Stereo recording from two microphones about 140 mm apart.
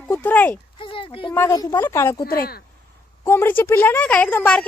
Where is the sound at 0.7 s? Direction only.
40° left (ahead or behind).